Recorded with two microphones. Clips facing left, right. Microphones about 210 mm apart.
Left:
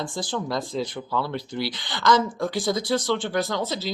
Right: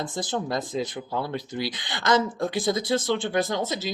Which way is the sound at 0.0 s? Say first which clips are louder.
Even; 20° right (ahead or behind).